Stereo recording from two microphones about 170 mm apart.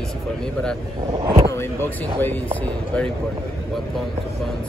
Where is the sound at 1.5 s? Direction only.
10° left (ahead or behind).